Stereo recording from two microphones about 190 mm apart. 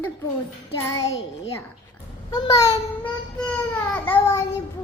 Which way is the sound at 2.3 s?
20° left (ahead or behind).